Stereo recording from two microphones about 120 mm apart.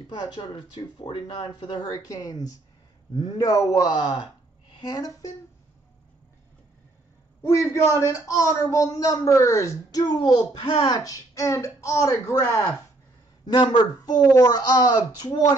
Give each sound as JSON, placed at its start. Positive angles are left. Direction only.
{"t": 0.1, "sound": "speech", "side_deg": 40}
{"t": 7.4, "sound": "a man's voice", "side_deg": 25}
{"t": 13.5, "sound": "speech", "side_deg": 35}